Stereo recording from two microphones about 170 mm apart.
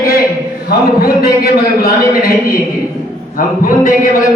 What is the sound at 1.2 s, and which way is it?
A man's voice, 60° left (ahead or behind).